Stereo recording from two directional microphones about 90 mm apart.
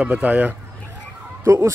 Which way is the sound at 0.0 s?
15° right (ahead or behind).